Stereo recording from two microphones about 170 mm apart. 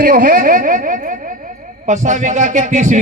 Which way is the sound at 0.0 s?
55° right (ahead or behind).